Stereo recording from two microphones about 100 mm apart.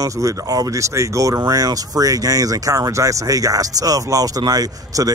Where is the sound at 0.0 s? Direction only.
35° right (ahead or behind).